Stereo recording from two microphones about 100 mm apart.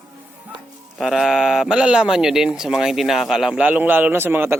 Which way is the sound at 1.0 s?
Centre (ahead or behind).